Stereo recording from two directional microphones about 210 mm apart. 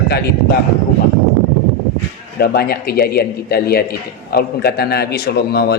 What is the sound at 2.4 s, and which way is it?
A man's voice, 50° left (ahead or behind).